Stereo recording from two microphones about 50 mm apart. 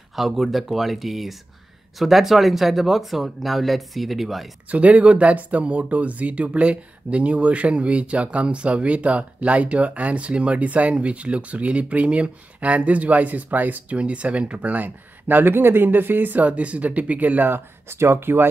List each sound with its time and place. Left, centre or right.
0.1 s speech: centre
4.6 s speech: right
13.9 s speech: right
17.9 s speech: right